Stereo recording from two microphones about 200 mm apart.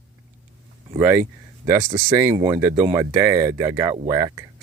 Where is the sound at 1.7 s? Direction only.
20° right (ahead or behind).